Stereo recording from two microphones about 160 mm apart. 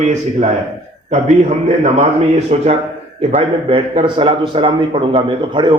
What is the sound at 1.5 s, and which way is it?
A man's voice, 45° right (ahead or behind).